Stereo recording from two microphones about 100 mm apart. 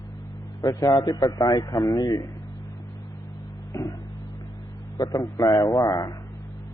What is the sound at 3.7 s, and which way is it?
Music, 25° left (ahead or behind).